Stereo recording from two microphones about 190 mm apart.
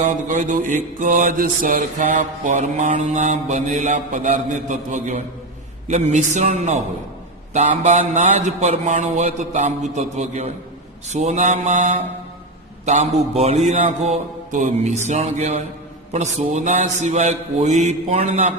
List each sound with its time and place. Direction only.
0.0 s mantra: 40° right (ahead or behind)